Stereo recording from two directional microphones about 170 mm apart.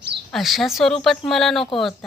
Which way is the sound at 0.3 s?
Centre (ahead or behind).